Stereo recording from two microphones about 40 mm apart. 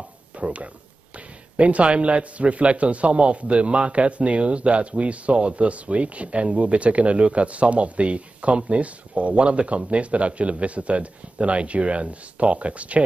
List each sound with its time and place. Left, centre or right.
0.4 s a man's voice: right